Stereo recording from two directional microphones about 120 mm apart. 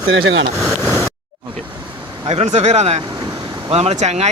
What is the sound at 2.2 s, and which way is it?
Speech, 60° right (ahead or behind).